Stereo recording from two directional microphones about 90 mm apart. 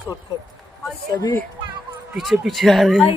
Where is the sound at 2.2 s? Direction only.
Centre (ahead or behind).